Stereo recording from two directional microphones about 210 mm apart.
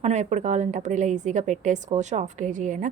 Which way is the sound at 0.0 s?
35° right (ahead or behind).